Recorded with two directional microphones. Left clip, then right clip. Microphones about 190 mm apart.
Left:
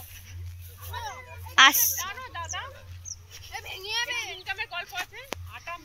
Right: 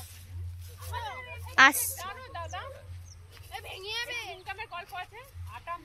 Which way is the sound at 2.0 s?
60° right (ahead or behind).